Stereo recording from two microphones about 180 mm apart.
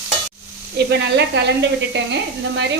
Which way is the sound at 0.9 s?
70° right (ahead or behind).